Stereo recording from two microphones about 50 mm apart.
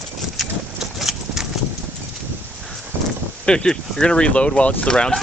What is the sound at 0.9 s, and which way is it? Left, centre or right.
Horse, centre.